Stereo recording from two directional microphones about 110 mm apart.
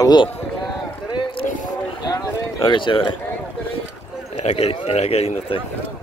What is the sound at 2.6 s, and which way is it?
Speech, 45° left (ahead or behind).